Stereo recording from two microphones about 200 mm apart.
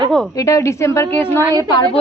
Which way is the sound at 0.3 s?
15° left (ahead or behind).